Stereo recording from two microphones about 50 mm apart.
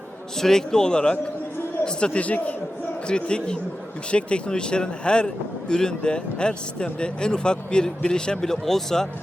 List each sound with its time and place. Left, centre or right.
0.3 s speech: centre; by 2.6 s left
3.1 s speech: centre